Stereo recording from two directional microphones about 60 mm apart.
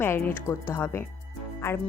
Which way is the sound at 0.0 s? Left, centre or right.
Left.